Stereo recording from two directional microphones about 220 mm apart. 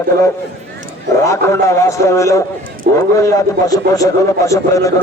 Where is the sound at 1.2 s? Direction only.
15° left (ahead or behind).